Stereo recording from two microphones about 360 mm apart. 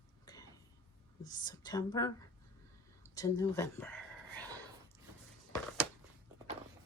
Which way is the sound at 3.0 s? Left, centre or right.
Centre.